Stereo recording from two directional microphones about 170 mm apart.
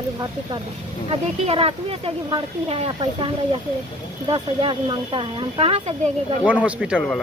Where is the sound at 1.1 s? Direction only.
35° right (ahead or behind).